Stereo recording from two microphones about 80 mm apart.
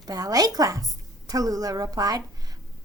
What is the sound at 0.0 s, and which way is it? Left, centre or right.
A woman's voice, right.